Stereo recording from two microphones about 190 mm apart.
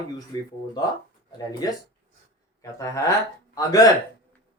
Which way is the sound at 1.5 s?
20° left (ahead or behind).